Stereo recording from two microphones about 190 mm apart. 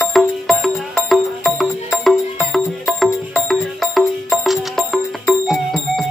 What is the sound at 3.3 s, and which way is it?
Music, centre (ahead or behind).